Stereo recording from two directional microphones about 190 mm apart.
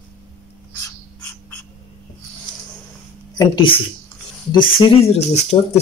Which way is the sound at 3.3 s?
25° left (ahead or behind).